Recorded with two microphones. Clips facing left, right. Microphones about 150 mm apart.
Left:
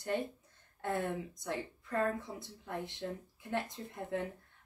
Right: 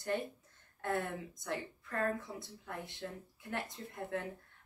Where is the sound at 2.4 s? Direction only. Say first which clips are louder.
Left 4 dB; 20° left (ahead or behind).